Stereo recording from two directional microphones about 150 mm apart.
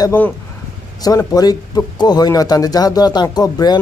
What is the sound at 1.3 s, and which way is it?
Speech, 25° left (ahead or behind).